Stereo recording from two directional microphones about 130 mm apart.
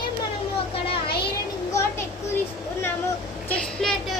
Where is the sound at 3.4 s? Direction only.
10° left (ahead or behind).